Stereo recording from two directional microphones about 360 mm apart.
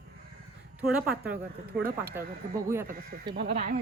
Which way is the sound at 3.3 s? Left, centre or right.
Right.